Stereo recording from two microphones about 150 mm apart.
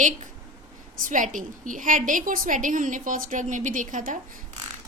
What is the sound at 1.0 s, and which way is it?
A woman's voice, 60° right (ahead or behind).